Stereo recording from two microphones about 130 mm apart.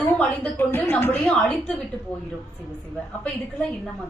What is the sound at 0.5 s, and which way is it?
A woman's voice, 15° left (ahead or behind).